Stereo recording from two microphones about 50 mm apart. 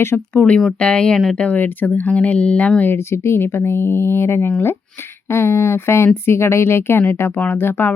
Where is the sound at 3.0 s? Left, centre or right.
Left.